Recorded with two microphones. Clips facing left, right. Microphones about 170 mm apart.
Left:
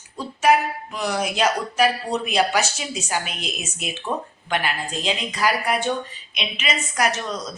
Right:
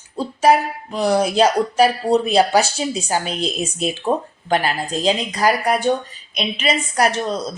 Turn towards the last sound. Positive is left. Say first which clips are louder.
# right 5 dB
turn(degrees=-30)  # may be behind; listen again after turning